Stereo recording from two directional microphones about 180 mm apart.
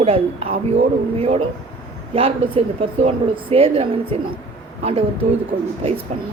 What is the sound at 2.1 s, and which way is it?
Speech, 30° right (ahead or behind).